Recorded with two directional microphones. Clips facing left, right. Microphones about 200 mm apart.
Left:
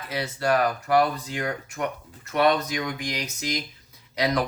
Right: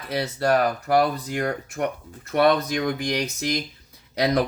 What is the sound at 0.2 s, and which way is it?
Speech, 40° right (ahead or behind).